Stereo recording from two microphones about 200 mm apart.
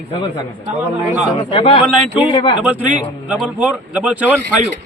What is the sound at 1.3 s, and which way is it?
Speech, 25° left (ahead or behind).